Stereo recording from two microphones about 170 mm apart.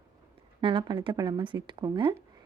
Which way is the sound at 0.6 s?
30° right (ahead or behind).